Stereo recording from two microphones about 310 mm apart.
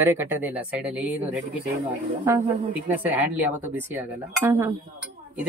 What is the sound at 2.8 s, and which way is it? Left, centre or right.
Speech, centre.